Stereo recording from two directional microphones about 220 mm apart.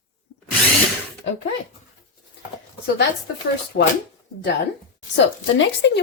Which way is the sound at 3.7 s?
50° left (ahead or behind).